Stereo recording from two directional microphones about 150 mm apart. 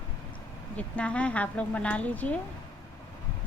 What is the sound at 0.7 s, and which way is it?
Speech, 10° left (ahead or behind).